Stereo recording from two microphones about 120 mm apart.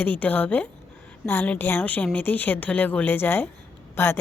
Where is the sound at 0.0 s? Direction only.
15° left (ahead or behind).